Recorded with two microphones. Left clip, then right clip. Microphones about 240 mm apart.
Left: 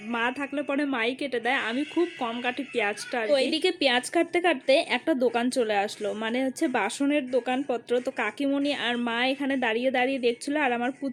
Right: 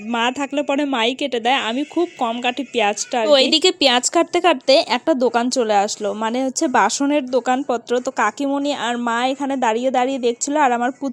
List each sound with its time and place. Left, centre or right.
0.1 s speech: right